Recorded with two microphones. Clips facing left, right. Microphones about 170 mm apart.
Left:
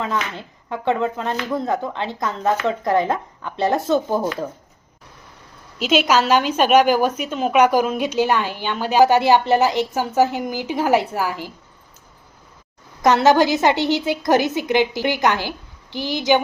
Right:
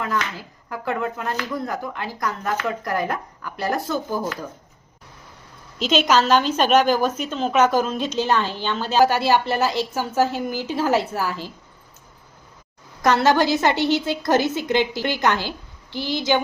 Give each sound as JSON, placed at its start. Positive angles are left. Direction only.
{"t": 0.0, "sound": "speech", "side_deg": 25}
{"t": 5.8, "sound": "a woman's voice", "side_deg": 10}
{"t": 13.0, "sound": "a woman's voice", "side_deg": 15}